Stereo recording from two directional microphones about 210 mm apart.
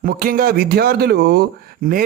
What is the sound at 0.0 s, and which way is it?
Speech, 40° right (ahead or behind).